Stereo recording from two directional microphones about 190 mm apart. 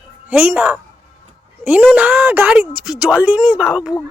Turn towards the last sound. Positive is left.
turn(degrees=-5)  # may be behind; listen again after turning